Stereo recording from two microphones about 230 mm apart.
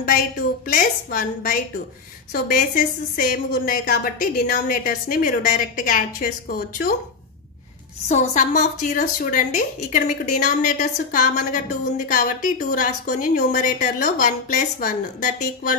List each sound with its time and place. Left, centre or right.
0.7 s a woman's voice: left
8.1 s a woman's voice: left